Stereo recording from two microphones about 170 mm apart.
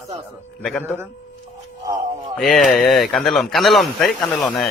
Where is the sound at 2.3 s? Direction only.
Centre (ahead or behind).